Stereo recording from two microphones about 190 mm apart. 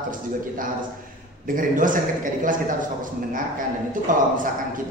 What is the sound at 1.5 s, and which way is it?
Speech, 45° right (ahead or behind).